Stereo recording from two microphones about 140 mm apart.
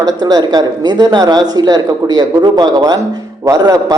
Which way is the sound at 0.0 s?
25° right (ahead or behind).